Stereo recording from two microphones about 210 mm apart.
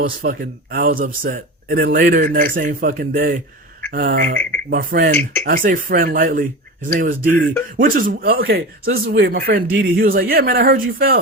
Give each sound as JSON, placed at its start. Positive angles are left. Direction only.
{"t": 0.0, "sound": "speech", "side_deg": -40}